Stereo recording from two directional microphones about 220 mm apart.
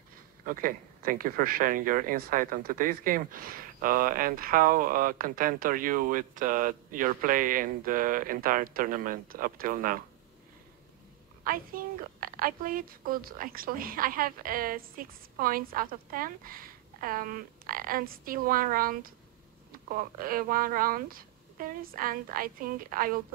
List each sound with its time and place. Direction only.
0.5 s speech: 40° right (ahead or behind)
11.4 s speech: 40° right (ahead or behind)
20.2 s speech: 40° right (ahead or behind)